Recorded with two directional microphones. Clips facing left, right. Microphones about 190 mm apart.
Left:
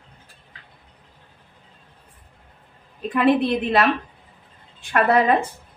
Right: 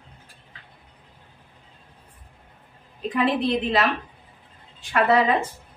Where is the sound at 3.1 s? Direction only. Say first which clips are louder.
Left 4 dB; 55° left (ahead or behind).